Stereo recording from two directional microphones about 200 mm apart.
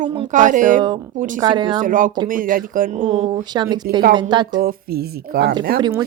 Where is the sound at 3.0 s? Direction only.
30° right (ahead or behind).